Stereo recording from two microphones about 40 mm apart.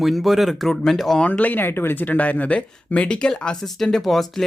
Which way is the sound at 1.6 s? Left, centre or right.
Left.